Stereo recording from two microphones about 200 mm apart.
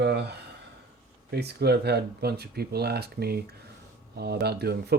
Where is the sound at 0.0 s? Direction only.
55° right (ahead or behind).